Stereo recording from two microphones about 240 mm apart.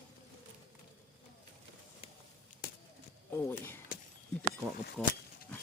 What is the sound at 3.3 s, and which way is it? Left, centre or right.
Speech, centre.